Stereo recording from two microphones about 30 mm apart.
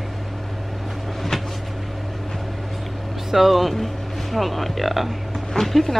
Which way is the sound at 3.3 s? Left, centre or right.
Centre.